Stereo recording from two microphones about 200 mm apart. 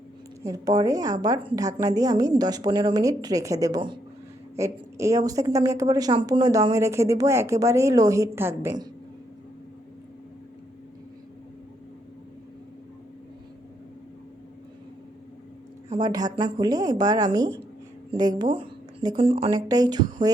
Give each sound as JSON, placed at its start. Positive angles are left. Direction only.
{"t": 0.4, "sound": "a woman's voice", "side_deg": -15}
{"t": 15.9, "sound": "a woman's voice", "side_deg": -20}